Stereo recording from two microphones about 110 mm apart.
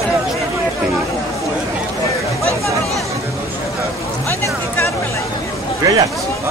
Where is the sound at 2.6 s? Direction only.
Centre (ahead or behind).